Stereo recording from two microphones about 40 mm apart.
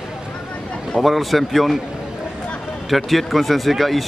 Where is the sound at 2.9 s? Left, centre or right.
Centre.